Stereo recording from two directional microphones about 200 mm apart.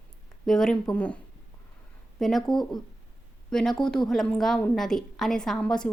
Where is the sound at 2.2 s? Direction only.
Centre (ahead or behind).